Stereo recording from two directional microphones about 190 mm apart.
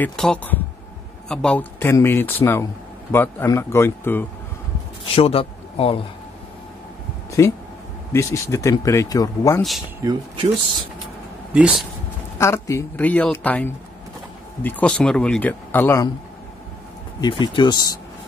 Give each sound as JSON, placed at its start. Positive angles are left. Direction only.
{"t": 0.0, "sound": "speech", "side_deg": 5}
{"t": 5.1, "sound": "speech", "side_deg": 30}
{"t": 7.2, "sound": "speech", "side_deg": 15}
{"t": 10.0, "sound": "speech", "side_deg": -30}
{"t": 11.5, "sound": "speech", "side_deg": -5}
{"t": 12.4, "sound": "speech", "side_deg": 15}
{"t": 17.2, "sound": "speech", "side_deg": 25}